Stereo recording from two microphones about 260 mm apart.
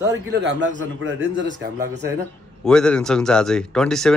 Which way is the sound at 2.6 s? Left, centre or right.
Centre.